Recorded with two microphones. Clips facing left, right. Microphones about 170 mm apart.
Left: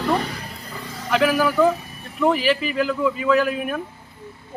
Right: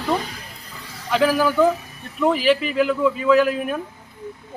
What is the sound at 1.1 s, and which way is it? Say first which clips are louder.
A man's voice: right 1 dB; centre (ahead or behind).